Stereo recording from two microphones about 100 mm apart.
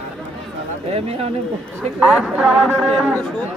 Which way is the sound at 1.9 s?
5° right (ahead or behind).